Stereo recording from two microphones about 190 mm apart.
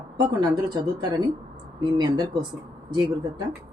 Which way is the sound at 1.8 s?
20° right (ahead or behind).